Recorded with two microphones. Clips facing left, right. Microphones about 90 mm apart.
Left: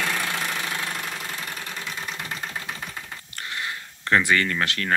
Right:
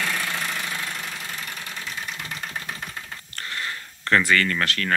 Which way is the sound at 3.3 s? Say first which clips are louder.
Even; 15° left (ahead or behind).